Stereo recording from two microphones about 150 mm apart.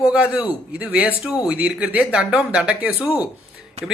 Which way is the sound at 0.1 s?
5° right (ahead or behind).